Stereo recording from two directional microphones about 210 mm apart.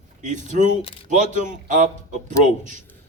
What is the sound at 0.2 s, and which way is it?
Speech, 35° right (ahead or behind).